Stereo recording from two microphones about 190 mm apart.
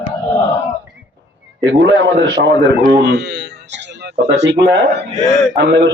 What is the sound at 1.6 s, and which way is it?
A man's voice, 70° right (ahead or behind).